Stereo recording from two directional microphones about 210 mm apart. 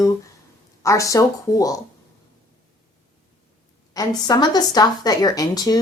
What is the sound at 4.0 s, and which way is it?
Speech, 20° left (ahead or behind).